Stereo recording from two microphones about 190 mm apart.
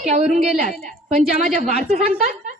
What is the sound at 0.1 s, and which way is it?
Speech, 40° right (ahead or behind).